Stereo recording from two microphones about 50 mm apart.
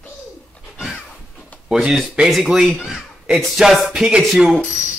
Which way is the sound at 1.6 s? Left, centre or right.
Centre.